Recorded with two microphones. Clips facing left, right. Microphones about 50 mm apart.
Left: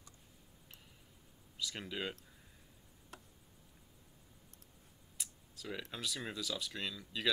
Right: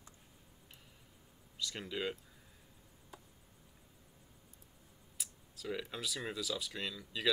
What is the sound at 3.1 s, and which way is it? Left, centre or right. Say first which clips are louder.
Insect: even; left.